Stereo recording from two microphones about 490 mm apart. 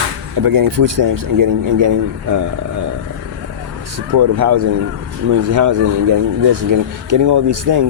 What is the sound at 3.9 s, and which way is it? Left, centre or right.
Speech, right.